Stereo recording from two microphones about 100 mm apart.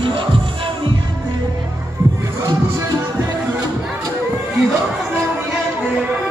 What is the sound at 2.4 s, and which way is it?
Music, 35° right (ahead or behind).